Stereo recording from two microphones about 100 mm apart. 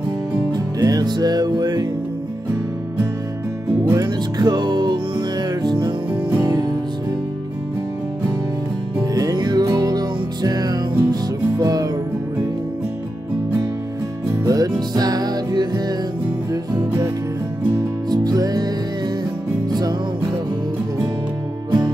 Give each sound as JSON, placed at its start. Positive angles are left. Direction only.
{"t": 0.5, "sound": "music", "side_deg": -40}
{"t": 3.9, "sound": "music", "side_deg": -40}
{"t": 6.4, "sound": "music", "side_deg": -35}
{"t": 9.1, "sound": "music", "side_deg": -40}
{"t": 14.4, "sound": "music", "side_deg": -40}
{"t": 18.1, "sound": "music", "side_deg": -40}
{"t": 21.6, "sound": "music", "side_deg": -45}